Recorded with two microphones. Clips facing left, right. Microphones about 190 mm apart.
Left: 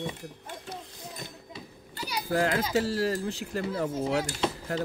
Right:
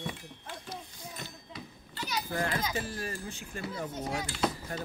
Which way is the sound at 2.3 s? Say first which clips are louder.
Left 8 dB; 80° left.